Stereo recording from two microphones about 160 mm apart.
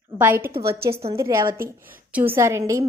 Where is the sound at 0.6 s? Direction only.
75° right (ahead or behind).